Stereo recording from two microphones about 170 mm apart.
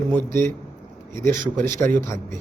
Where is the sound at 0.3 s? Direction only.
15° left (ahead or behind).